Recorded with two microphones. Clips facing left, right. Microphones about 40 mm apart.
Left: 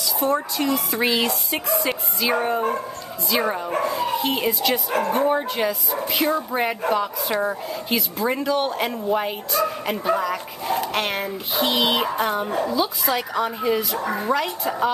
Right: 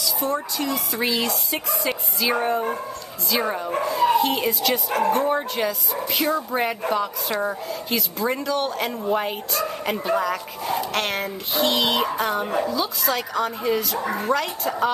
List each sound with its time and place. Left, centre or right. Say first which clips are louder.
0.2 s speech: left 5 dB; left
1.3 s speech: left 3 dB; centre